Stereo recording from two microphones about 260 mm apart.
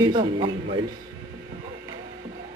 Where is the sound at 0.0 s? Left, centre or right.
Centre.